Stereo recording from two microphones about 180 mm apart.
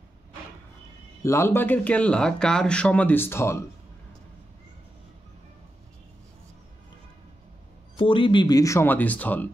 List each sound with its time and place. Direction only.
1.2 s speech: 15° left (ahead or behind)
8.0 s speech: 30° left (ahead or behind); by 9.5 s 10° left (ahead or behind)